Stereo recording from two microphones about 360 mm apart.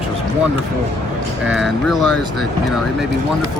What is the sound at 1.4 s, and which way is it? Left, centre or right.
Speech, right.